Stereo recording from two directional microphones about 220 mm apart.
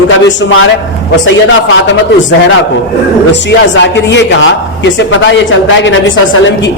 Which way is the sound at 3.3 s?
55° left (ahead or behind).